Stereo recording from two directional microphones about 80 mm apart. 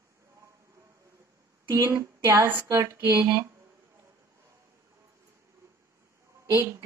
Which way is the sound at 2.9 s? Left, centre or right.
Right.